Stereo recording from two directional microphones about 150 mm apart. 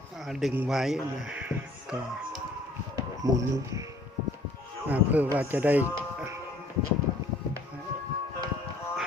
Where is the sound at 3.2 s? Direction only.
25° right (ahead or behind).